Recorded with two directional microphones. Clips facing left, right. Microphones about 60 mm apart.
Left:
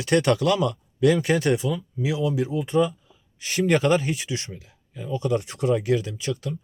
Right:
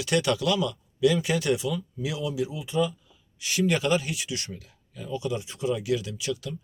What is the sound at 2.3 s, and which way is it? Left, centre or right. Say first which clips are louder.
Speech: left 6 dB; left.